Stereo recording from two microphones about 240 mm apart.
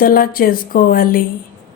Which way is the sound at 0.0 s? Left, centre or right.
Left.